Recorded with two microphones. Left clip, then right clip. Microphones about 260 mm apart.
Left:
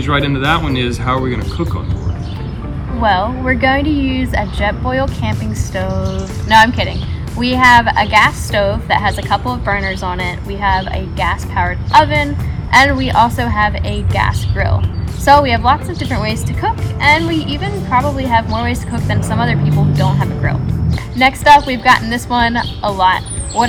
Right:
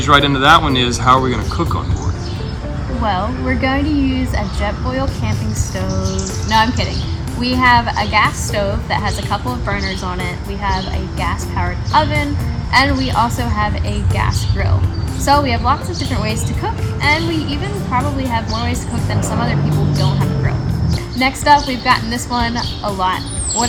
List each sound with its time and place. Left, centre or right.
0.0 s speech: centre
3.0 s a woman's voice: centre
3.9 s speech: left
4.4 s a woman's voice: centre
6.5 s a woman's voice: centre
21.2 s a woman's voice: centre